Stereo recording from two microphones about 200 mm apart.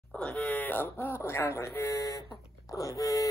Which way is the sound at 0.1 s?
5° left (ahead or behind).